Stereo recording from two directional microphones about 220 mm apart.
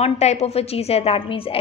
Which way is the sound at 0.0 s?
30° left (ahead or behind).